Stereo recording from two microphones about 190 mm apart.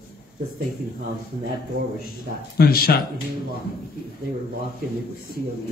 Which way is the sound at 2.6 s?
55° left (ahead or behind).